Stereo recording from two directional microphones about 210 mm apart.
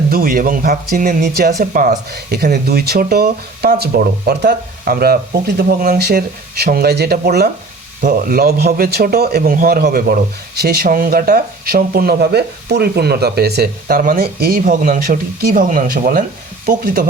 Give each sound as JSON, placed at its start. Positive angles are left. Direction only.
{"t": 0.1, "sound": "speech", "side_deg": -45}